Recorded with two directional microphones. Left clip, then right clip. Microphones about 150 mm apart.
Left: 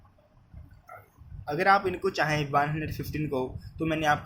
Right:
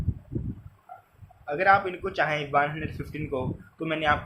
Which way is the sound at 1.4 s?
45° left (ahead or behind).